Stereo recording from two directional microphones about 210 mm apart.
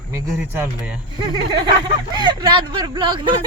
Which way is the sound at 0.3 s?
10° right (ahead or behind).